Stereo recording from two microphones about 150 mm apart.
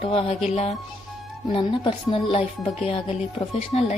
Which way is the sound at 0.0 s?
35° left (ahead or behind).